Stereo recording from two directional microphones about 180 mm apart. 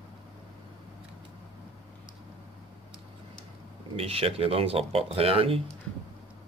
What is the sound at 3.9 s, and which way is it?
Speech, 30° right (ahead or behind).